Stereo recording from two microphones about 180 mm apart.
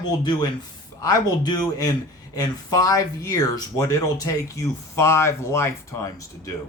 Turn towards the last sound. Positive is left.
turn(degrees=15)  # may be behind; listen again after turning